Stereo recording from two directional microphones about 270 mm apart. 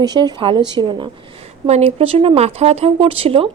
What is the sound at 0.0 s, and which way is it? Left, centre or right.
Speech, centre.